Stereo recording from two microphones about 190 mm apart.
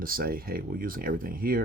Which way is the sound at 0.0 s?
50° right (ahead or behind).